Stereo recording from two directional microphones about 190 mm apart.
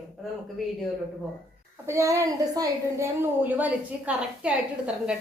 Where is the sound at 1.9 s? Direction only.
15° right (ahead or behind).